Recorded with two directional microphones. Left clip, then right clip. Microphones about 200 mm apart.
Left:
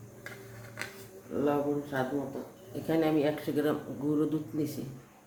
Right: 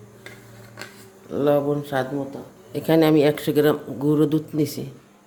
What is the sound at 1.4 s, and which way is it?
Speech, 60° right (ahead or behind).